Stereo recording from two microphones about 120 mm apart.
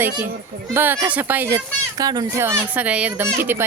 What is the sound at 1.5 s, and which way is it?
Speech, 30° right (ahead or behind).